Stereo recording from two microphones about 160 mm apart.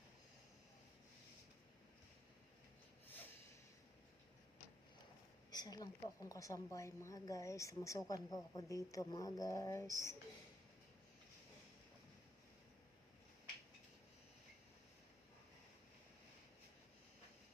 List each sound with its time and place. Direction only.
5.5 s speech: 25° left (ahead or behind)